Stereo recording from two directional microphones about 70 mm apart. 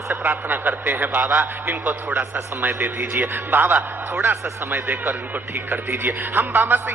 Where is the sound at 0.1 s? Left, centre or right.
Right.